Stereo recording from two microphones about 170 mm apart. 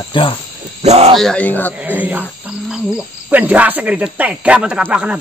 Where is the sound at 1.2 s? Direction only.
5° left (ahead or behind).